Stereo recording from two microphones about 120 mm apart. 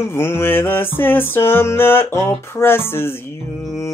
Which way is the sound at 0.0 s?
20° left (ahead or behind).